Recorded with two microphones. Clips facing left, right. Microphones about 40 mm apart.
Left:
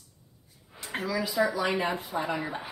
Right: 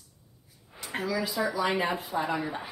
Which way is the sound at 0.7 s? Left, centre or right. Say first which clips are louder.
Left 1 dB; centre.